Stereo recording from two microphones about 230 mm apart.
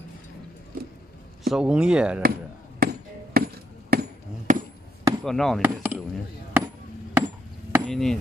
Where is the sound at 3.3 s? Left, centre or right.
Right.